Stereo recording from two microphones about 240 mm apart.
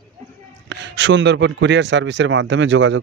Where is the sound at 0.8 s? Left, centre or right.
Right.